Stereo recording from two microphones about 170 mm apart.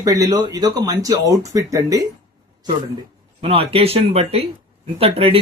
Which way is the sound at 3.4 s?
35° right (ahead or behind).